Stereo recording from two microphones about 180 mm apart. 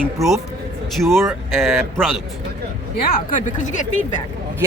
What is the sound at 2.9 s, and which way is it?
Speech, 50° left (ahead or behind).